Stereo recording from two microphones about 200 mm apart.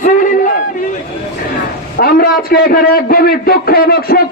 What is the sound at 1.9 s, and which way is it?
A man's voice, 50° left (ahead or behind).